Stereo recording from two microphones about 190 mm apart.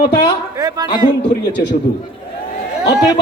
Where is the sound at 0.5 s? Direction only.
20° right (ahead or behind).